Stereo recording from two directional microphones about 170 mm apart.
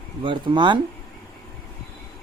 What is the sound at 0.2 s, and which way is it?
Speech, 30° right (ahead or behind).